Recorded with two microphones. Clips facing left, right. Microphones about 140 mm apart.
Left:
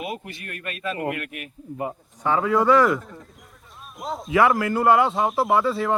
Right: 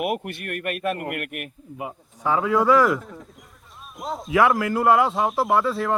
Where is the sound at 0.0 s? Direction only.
60° right (ahead or behind).